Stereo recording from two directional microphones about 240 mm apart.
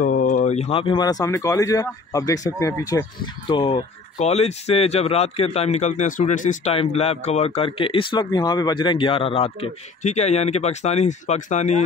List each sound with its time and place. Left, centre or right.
0.0 s speech: left